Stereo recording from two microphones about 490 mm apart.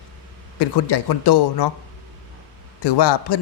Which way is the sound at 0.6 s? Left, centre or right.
Left.